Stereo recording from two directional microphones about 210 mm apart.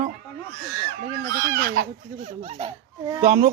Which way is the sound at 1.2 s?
45° right (ahead or behind).